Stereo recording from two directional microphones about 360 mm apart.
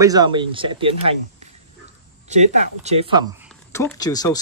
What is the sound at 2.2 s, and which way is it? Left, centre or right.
Speech, centre.